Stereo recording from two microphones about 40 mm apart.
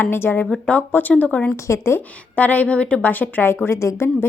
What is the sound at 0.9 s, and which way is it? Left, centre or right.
Speech, left.